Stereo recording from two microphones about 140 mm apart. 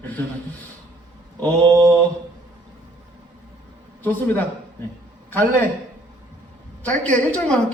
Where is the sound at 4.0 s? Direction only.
15° left (ahead or behind).